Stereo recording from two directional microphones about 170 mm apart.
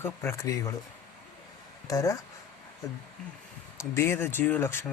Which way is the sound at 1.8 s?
20° left (ahead or behind).